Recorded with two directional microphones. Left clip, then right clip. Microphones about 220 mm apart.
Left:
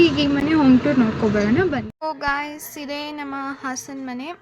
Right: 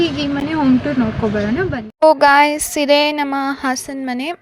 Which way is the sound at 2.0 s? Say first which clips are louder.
Right 17 dB; 35° right (ahead or behind).